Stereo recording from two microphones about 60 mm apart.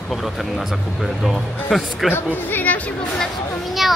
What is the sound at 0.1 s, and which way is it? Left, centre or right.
Speech, centre.